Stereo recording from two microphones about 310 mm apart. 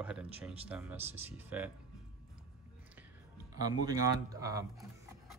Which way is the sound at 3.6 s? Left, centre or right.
Centre.